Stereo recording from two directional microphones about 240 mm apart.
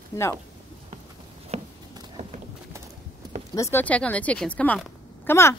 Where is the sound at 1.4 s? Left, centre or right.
Right.